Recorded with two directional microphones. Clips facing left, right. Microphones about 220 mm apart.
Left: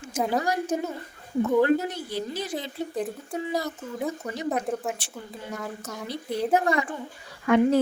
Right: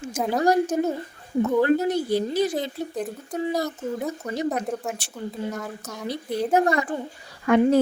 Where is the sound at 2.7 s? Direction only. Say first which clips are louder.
Even; centre (ahead or behind).